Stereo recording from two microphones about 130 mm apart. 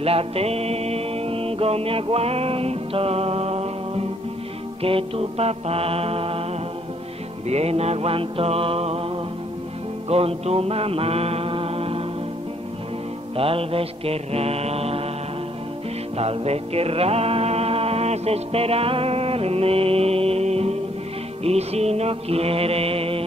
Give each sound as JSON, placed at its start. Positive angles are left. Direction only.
{"t": 0.0, "sound": "music", "side_deg": -50}
{"t": 4.8, "sound": "mantra", "side_deg": -45}
{"t": 7.4, "sound": "mantra", "side_deg": -55}
{"t": 10.0, "sound": "mantra", "side_deg": -50}
{"t": 13.4, "sound": "mantra", "side_deg": -45}
{"t": 16.2, "sound": "music", "side_deg": -50}
{"t": 21.5, "sound": "mantra", "side_deg": -55}